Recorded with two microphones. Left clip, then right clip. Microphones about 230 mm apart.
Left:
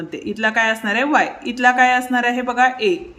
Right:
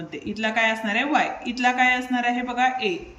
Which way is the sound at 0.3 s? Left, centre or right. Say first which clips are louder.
Left 5 dB; centre.